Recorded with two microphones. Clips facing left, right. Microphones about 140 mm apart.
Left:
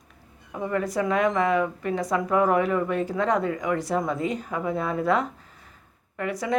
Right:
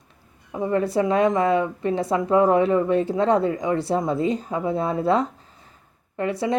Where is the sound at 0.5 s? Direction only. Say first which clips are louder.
Right 5 dB; 25° right (ahead or behind).